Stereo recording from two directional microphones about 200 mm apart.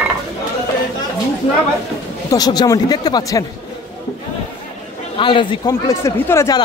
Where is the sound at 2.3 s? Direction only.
20° left (ahead or behind).